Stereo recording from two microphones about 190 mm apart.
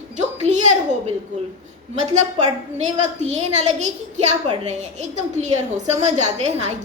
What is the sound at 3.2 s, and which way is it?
Speech, 35° right (ahead or behind).